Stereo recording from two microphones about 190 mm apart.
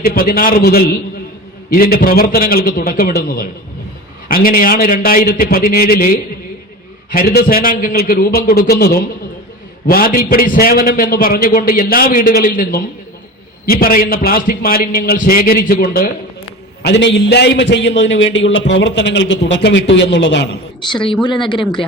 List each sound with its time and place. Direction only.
0.1 s a man's voice: 50° left (ahead or behind)
16.8 s a man's voice: 70° left (ahead or behind)
20.8 s speech: 25° left (ahead or behind)